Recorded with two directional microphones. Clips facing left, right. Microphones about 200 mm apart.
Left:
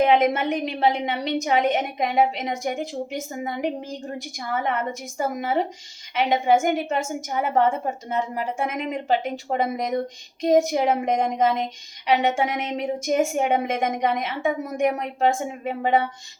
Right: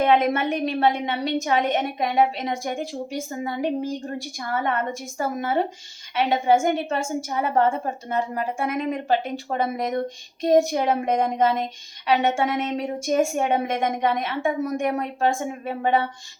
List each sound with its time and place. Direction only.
0.0 s a woman's voice: 15° left (ahead or behind)
4.5 s a woman's voice: 20° left (ahead or behind)